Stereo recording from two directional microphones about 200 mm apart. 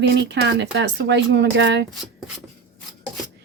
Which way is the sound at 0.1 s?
55° right (ahead or behind).